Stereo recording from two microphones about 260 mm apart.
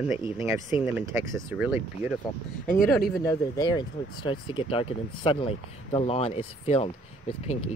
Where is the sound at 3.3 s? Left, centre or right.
Centre.